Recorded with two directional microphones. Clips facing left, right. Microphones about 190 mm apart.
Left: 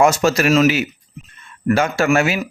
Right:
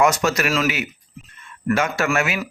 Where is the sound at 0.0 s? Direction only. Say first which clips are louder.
Left 4 dB; 30° left (ahead or behind).